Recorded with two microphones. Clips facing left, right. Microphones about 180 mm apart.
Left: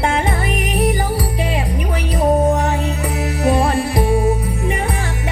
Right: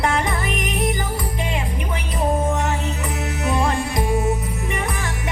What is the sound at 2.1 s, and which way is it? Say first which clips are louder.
Music: left 6 dB; 35° left (ahead or behind).